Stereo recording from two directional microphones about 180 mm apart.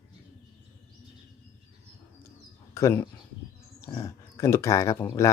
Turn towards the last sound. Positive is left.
turn(degrees=15)  # may be behind; listen again after turning